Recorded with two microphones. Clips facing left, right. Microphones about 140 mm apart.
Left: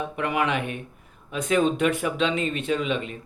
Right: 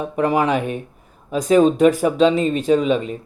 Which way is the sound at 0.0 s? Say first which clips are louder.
Right 7 dB; 35° right (ahead or behind).